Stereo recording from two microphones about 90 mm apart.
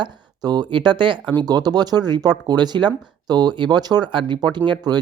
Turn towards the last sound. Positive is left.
turn(degrees=-55)  # may be behind; listen again after turning